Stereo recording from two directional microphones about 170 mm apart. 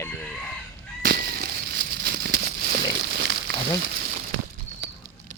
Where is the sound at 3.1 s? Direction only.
75° right (ahead or behind).